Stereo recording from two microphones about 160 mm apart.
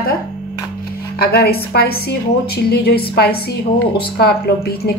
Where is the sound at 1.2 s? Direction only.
75° left (ahead or behind).